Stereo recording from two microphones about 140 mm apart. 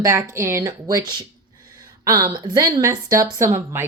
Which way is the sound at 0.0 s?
20° right (ahead or behind).